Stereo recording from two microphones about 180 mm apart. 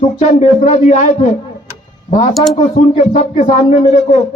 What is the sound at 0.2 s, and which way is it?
A man's voice, 40° left (ahead or behind).